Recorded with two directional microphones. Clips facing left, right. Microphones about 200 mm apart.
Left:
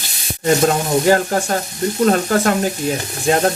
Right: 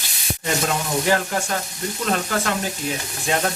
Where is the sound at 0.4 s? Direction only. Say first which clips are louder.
Left 9 dB; 40° left (ahead or behind).